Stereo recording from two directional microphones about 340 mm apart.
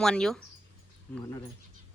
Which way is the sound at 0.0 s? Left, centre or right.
Centre.